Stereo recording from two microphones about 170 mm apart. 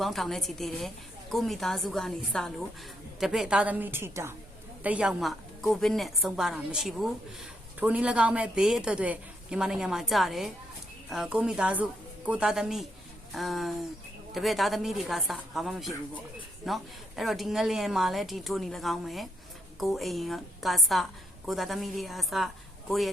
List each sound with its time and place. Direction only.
0.0 s a woman's voice: centre (ahead or behind)